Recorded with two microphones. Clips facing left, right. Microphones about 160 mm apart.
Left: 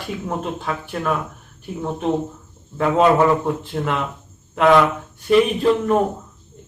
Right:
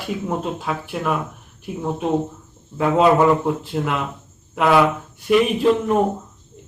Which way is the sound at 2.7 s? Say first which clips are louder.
Even; 5° right (ahead or behind).